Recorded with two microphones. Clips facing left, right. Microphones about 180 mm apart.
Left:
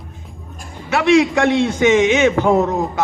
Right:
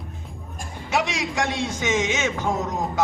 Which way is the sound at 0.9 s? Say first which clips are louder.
Left 12 dB; 60° left (ahead or behind).